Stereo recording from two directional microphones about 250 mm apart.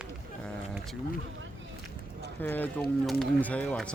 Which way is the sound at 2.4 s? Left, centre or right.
Centre.